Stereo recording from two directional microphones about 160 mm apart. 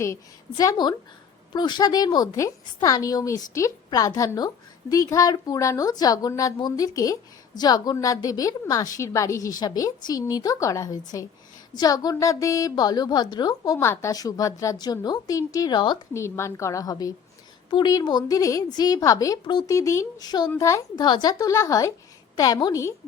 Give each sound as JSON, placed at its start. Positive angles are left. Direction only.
{"t": 0.0, "sound": "a woman's voice", "side_deg": 20}